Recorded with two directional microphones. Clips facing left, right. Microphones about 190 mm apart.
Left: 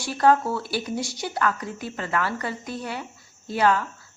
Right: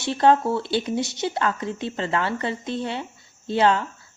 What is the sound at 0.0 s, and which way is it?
Speech, 25° right (ahead or behind).